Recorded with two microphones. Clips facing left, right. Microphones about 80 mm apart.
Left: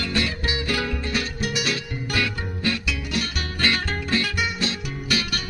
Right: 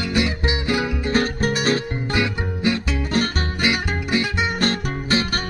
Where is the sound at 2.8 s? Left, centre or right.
Right.